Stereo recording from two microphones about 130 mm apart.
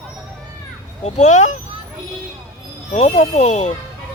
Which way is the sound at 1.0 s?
65° left (ahead or behind).